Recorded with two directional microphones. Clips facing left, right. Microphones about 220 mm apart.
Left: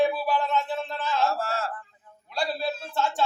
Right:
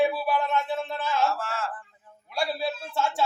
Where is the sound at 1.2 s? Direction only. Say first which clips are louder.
Left 1 dB; 35° left (ahead or behind).